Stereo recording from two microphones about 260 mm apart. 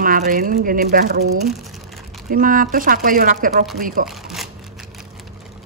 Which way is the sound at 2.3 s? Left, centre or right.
Right.